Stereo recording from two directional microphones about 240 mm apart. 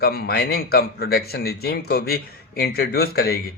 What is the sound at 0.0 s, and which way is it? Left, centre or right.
Speech, left.